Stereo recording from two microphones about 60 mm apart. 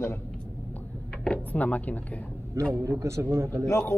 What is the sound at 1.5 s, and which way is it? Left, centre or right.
Speech, left.